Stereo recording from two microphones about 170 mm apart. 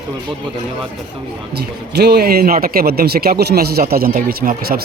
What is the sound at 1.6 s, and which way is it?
Speech, 70° right (ahead or behind).